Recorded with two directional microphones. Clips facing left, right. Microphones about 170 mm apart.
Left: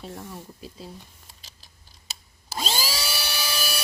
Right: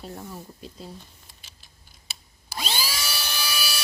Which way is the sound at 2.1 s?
40° left (ahead or behind).